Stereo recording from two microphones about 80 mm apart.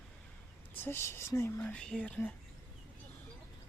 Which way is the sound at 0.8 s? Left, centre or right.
Left.